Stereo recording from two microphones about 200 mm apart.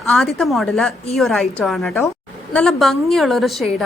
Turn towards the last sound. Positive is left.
turn(degrees=0)  # may be behind; listen again after turning